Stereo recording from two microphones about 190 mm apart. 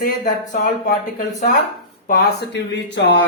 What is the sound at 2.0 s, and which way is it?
Speech, 55° left (ahead or behind).